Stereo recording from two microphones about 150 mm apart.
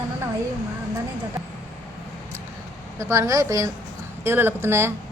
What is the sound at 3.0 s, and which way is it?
Speech, 20° right (ahead or behind).